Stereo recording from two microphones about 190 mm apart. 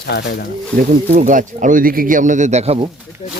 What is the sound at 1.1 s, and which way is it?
Speech, 45° right (ahead or behind).